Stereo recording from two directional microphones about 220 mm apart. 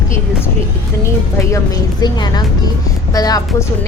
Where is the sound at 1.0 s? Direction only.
15° left (ahead or behind).